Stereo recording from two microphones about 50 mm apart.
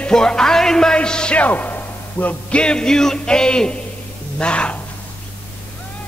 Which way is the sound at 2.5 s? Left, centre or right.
Centre.